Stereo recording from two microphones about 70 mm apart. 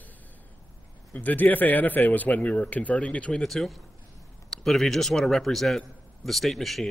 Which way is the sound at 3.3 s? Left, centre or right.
Centre.